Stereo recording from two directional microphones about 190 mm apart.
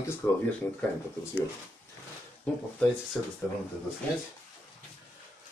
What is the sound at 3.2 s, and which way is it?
Speech, 5° left (ahead or behind).